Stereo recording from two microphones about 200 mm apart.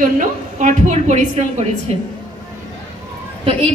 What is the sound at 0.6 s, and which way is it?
Speech, 35° right (ahead or behind).